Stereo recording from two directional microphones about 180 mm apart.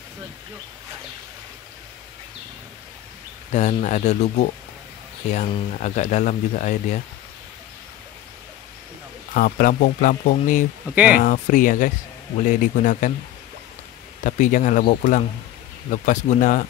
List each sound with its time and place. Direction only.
3.5 s speech: 40° left (ahead or behind)
9.3 s speech: 50° left (ahead or behind)
14.2 s speech: 45° left (ahead or behind)